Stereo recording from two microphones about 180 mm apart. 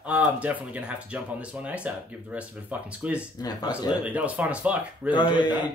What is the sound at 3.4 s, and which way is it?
Speech, 25° left (ahead or behind).